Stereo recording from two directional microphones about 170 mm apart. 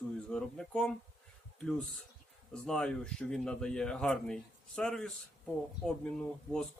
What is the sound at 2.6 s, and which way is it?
Speech, 5° left (ahead or behind).